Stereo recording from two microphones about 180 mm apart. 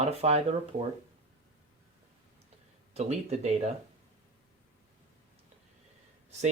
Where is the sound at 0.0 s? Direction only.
35° right (ahead or behind).